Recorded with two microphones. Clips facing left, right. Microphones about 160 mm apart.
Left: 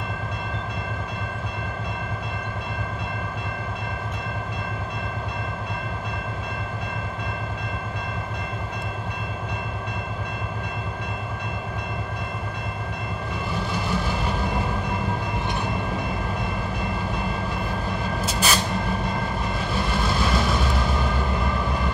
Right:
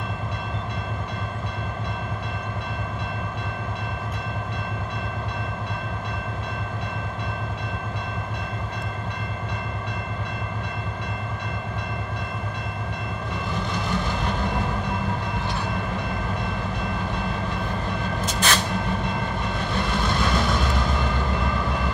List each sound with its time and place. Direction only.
13.8 s train: 5° left (ahead or behind)
18.2 s vehicle: 5° left (ahead or behind)
19.7 s vehicle: 5° left (ahead or behind)